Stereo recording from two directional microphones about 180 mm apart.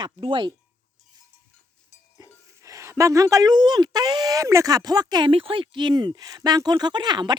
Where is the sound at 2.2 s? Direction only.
20° right (ahead or behind).